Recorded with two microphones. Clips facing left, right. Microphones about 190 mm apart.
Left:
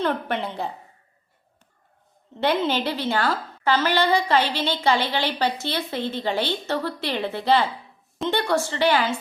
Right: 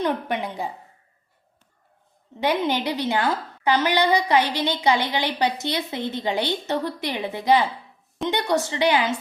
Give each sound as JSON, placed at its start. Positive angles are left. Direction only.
{"t": 0.0, "sound": "a woman's voice", "side_deg": -15}
{"t": 2.4, "sound": "a woman's voice", "side_deg": -15}